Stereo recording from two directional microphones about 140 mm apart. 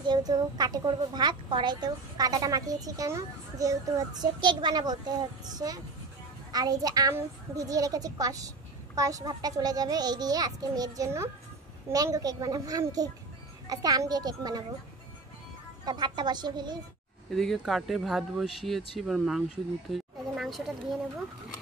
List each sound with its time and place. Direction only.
0.0 s a woman's voice: 30° right (ahead or behind)
15.8 s a woman's voice: 30° right (ahead or behind)
17.3 s speech: centre (ahead or behind)